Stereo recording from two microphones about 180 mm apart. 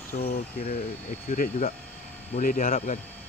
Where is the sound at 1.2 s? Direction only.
50° left (ahead or behind).